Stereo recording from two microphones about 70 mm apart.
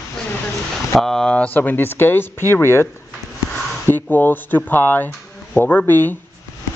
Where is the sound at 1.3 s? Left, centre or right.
Left.